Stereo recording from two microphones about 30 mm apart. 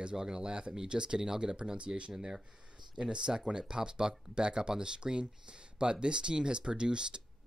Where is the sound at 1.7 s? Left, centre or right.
Right.